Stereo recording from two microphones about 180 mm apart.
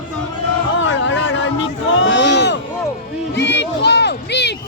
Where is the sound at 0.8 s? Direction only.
90° left.